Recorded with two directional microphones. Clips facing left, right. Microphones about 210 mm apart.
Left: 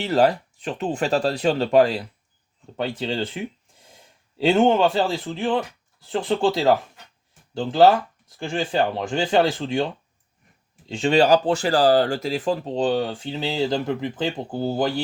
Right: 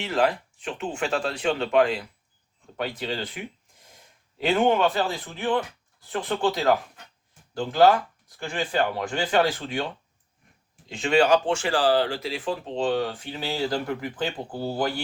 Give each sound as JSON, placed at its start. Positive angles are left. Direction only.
{"t": 0.0, "sound": "speech", "side_deg": 35}
{"t": 10.8, "sound": "speech", "side_deg": 30}